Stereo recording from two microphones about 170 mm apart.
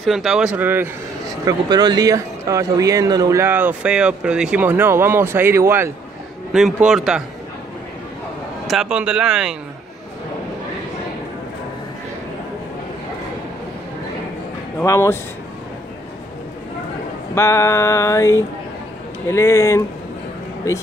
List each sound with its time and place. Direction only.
0.0 s a man's voice: centre (ahead or behind)
1.4 s speech: 25° right (ahead or behind)
6.5 s a man's voice: centre (ahead or behind)
8.6 s a man's voice: 5° right (ahead or behind)
14.8 s mantra: 15° left (ahead or behind)
17.4 s mantra: 15° left (ahead or behind)